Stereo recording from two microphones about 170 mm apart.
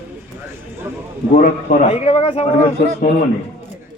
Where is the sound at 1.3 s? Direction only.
45° left (ahead or behind).